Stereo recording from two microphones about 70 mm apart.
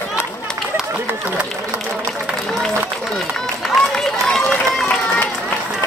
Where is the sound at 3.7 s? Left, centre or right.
Centre.